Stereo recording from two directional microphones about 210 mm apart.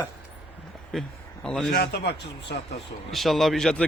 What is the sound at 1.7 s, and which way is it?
Speech, 50° left (ahead or behind).